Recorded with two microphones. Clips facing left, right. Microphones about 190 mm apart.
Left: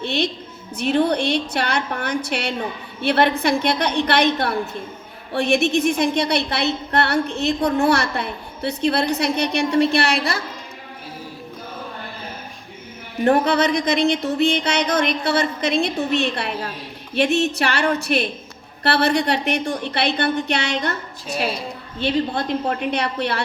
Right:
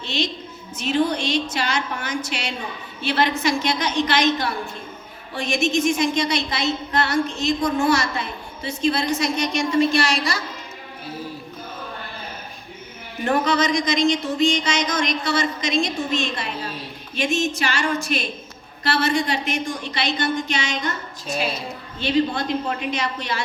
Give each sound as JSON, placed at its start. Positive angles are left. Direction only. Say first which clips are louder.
{"t": 0.0, "sound": "a woman's voice", "louder": "left 3 dB", "side_deg": 60}
{"t": 13.2, "sound": "a woman's voice", "louder": "left 3 dB", "side_deg": 60}
{"t": 21.9, "sound": "a woman's voice", "louder": "even", "side_deg": 60}